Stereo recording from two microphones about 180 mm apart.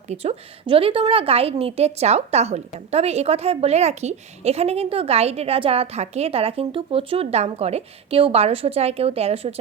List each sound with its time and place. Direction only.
0.1 s a woman's voice: 35° right (ahead or behind)